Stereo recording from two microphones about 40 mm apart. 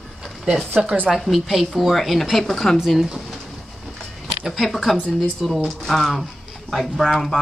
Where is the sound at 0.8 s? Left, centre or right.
Right.